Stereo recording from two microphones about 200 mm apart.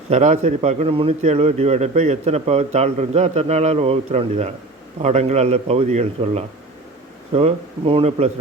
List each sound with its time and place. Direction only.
0.1 s a man's voice: 35° right (ahead or behind)